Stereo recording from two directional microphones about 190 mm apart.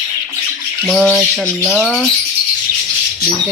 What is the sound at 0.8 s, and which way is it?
Bird, centre (ahead or behind).